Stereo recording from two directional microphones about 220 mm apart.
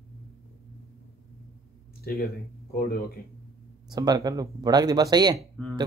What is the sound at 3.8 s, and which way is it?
Speech, 20° right (ahead or behind).